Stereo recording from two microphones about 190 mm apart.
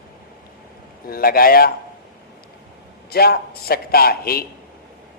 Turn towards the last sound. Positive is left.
turn(degrees=55)  # may be behind; listen again after turning